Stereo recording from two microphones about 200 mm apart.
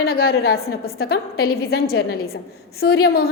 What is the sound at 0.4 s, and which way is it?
A woman's voice, 50° left (ahead or behind).